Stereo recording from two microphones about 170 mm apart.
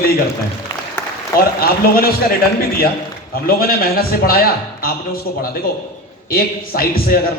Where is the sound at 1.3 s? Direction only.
60° left (ahead or behind).